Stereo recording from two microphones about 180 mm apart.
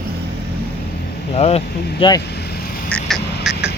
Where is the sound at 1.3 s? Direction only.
35° left (ahead or behind).